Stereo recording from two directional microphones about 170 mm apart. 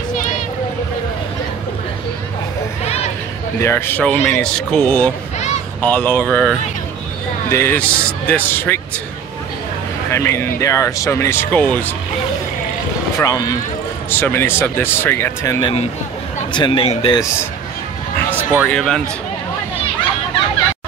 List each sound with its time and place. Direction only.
2.8 s a sound: 40° left (ahead or behind)
3.6 s speech: 15° left (ahead or behind)
10.1 s speech: 15° left (ahead or behind)
13.2 s speech: 20° left (ahead or behind)
15.6 s speech: 35° left (ahead or behind)
18.3 s a sound: 10° right (ahead or behind)
18.7 s speech: 5° left (ahead or behind)